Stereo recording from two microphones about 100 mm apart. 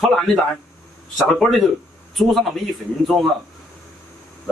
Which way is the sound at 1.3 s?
Centre (ahead or behind).